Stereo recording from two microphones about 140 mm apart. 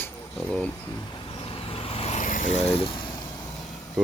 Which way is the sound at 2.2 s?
65° left (ahead or behind).